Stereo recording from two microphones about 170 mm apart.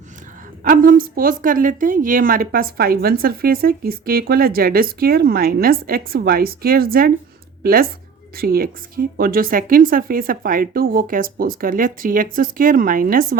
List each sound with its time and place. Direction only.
0.6 s a woman's voice: 55° right (ahead or behind)